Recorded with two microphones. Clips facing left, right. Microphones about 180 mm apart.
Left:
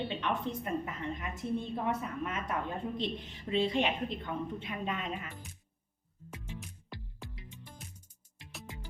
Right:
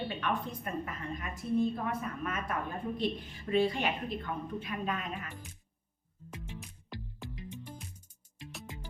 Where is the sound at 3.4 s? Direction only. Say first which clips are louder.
Right 1 dB; 20° left (ahead or behind).